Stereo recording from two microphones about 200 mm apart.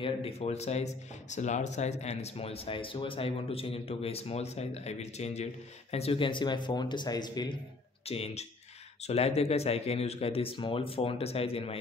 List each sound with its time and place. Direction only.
0.0 s speech: 30° left (ahead or behind)